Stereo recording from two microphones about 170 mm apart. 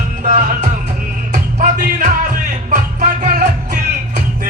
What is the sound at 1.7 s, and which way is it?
Music, 50° right (ahead or behind).